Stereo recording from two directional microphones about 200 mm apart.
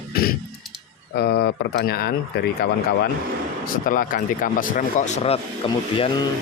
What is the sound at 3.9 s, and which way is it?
Speech, 45° left (ahead or behind).